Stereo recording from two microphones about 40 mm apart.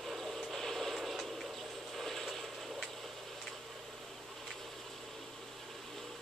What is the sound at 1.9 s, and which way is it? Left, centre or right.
Ratchet, centre.